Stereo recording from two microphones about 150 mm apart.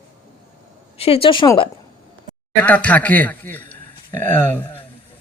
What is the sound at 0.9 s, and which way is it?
Speech, 40° left (ahead or behind).